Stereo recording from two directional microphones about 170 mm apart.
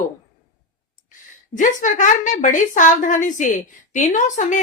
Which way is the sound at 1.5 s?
45° left (ahead or behind).